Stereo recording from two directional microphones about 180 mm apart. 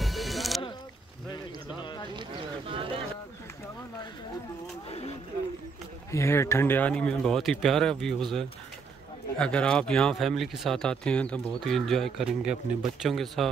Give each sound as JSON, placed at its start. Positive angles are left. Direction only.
{"t": 0.0, "sound": "music", "side_deg": 0}
{"t": 1.3, "sound": "a sound", "side_deg": 25}
{"t": 2.7, "sound": "bird", "side_deg": -30}
{"t": 4.8, "sound": "vehicle", "side_deg": 35}
{"t": 6.1, "sound": "speech", "side_deg": 15}